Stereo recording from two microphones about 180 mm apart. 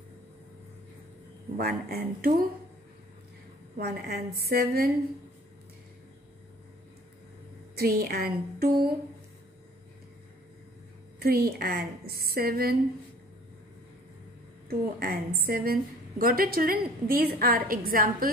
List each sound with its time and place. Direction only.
1.6 s a woman's voice: 60° right (ahead or behind)
3.7 s a woman's voice: 60° right (ahead or behind)
7.7 s a woman's voice: 55° right (ahead or behind)
11.1 s a woman's voice: 55° right (ahead or behind)
14.7 s a woman's voice: 55° right (ahead or behind)